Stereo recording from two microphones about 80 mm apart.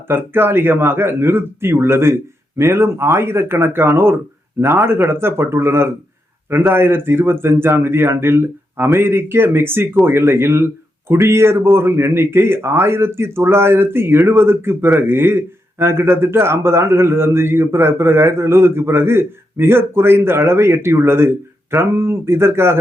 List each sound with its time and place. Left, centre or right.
0.1 s a man's voice: right